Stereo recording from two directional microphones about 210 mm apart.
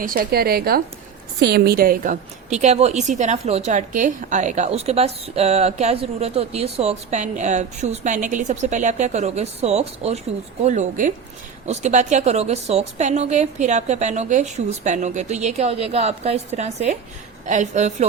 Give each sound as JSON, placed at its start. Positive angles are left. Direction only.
{"t": 0.0, "sound": "a woman's voice", "side_deg": -40}